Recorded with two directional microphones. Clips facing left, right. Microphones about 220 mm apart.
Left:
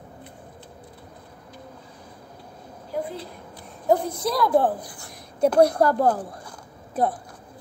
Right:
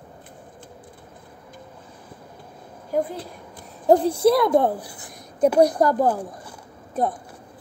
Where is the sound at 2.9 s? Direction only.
45° right (ahead or behind).